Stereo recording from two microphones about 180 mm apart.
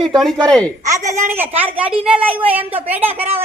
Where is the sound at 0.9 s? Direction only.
15° right (ahead or behind).